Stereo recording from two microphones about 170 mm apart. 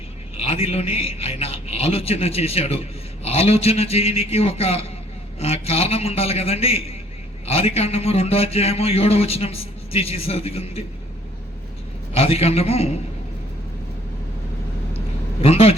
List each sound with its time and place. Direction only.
0.3 s a man's voice: 35° left (ahead or behind)
12.1 s a man's voice: 35° left (ahead or behind)
15.4 s speech: 35° left (ahead or behind)